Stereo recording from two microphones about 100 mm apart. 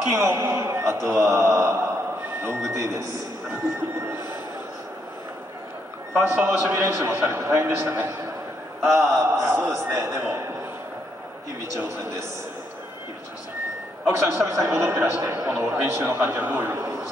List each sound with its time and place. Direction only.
0.1 s a man's voice: 30° right (ahead or behind)
6.2 s a man's voice: 20° right (ahead or behind)
14.0 s a man's voice: 25° right (ahead or behind)